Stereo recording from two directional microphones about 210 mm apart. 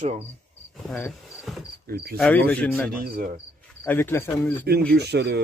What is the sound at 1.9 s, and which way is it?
Speech, 45° right (ahead or behind).